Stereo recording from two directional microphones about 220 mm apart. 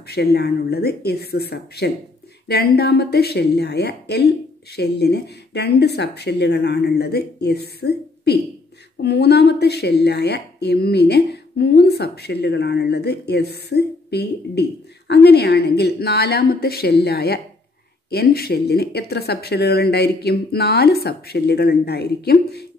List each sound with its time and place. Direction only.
0.0 s a woman's voice: 45° left (ahead or behind)